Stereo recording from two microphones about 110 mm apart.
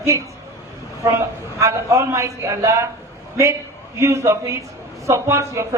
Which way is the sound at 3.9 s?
25° right (ahead or behind).